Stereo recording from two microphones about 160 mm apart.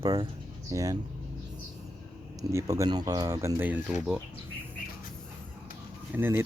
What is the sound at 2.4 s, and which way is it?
Speech, 20° right (ahead or behind).